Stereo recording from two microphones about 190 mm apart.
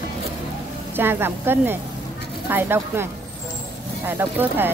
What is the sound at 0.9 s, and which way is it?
Speech, 10° right (ahead or behind).